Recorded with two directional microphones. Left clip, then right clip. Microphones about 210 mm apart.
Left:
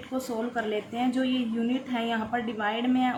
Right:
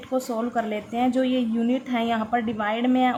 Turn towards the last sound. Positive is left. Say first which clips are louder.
# right 4 dB
turn(degrees=-40)  # may be behind; listen again after turning